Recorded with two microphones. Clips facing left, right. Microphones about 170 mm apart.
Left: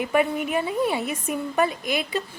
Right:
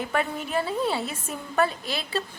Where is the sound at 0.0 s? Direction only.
10° left (ahead or behind).